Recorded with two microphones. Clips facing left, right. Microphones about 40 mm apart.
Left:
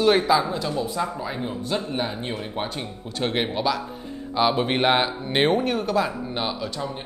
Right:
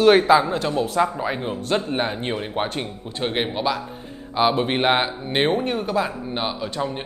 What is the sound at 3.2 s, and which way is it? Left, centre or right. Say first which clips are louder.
Speech: right 1 dB; centre.